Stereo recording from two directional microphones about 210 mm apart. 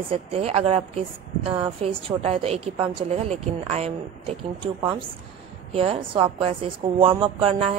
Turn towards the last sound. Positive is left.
turn(degrees=-25)  # may be behind; listen again after turning